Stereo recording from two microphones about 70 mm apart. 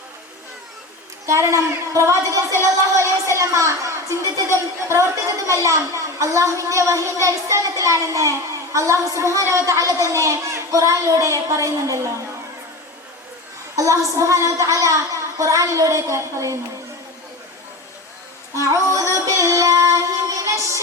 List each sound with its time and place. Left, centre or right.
1.3 s a woman's voice: right
13.7 s a woman's voice: right
18.6 s female singing: right